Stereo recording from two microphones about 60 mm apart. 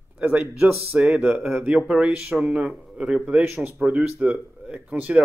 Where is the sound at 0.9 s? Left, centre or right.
Centre.